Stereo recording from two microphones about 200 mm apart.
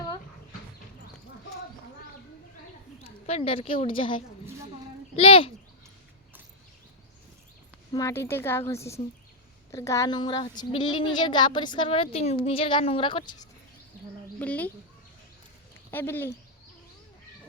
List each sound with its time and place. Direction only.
3.0 s a woman's voice: 30° left (ahead or behind)
7.9 s a woman's voice: 15° left (ahead or behind)
14.3 s a woman's voice: 5° left (ahead or behind)
15.9 s a woman's voice: 10° left (ahead or behind)